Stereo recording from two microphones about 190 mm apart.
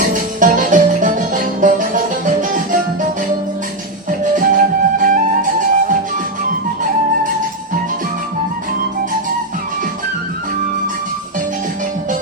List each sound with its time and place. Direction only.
0.1 s music: 45° right (ahead or behind)
4.2 s flute: 45° right (ahead or behind)